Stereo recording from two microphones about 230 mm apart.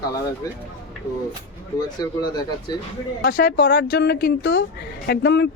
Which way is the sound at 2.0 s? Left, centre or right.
Centre.